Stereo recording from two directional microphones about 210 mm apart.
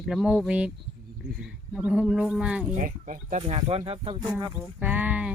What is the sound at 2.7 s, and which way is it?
Speech, 40° right (ahead or behind).